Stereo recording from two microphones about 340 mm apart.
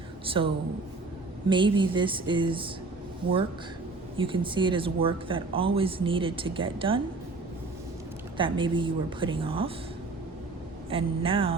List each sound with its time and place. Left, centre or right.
0.3 s speech: centre
4.2 s speech: centre
8.4 s speech: centre
10.8 s speech: centre